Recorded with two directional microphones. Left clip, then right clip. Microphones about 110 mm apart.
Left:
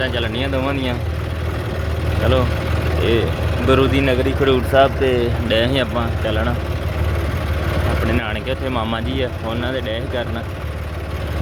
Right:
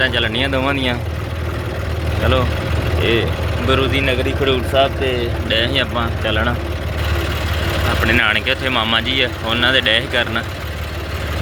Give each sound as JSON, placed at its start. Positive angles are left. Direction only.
{"t": 0.0, "sound": "speech", "side_deg": 20}
{"t": 3.0, "sound": "speech", "side_deg": 30}
{"t": 3.7, "sound": "speech", "side_deg": 80}
{"t": 6.0, "sound": "speech", "side_deg": 25}
{"t": 8.0, "sound": "speech", "side_deg": 20}